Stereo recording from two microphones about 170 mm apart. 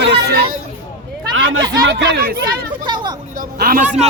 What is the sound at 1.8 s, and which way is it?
Speech, 80° right.